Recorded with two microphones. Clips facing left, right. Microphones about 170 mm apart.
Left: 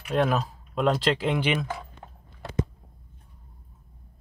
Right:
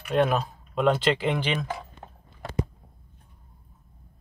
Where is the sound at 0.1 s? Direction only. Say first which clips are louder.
Right 1 dB; centre (ahead or behind).